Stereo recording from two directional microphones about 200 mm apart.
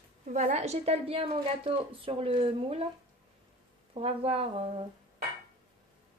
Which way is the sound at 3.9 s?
30° right (ahead or behind).